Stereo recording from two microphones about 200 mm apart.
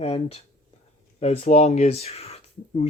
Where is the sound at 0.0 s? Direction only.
30° left (ahead or behind).